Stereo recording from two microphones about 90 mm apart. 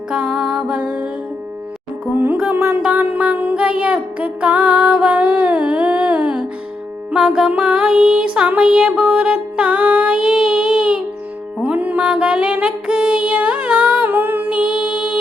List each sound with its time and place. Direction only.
0.1 s music: 10° right (ahead or behind)
2.1 s music: 20° right (ahead or behind)
2.8 s music: 15° right (ahead or behind)
11.6 s mantra: 15° right (ahead or behind)